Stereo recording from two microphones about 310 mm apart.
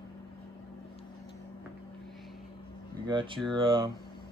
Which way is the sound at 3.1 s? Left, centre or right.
Centre.